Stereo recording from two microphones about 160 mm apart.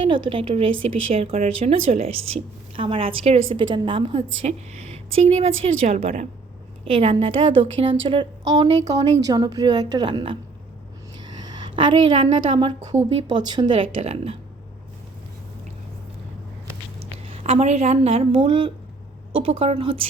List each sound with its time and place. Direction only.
0.0 s speech: 35° right (ahead or behind)
4.4 s a woman's voice: 45° right (ahead or behind); by 10.3 s 30° right (ahead or behind)
11.2 s a sound: 25° right (ahead or behind)
13.2 s a woman's voice: 25° right (ahead or behind)
17.0 s a woman's voice: 35° right (ahead or behind)